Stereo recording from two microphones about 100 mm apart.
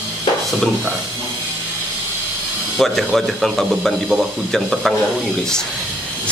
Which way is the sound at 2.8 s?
Centre (ahead or behind).